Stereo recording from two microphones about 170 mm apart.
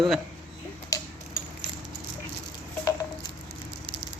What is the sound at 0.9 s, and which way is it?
Tick-tock, 20° left (ahead or behind).